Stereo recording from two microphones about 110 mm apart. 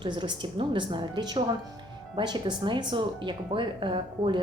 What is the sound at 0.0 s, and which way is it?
A woman's voice, 45° right (ahead or behind).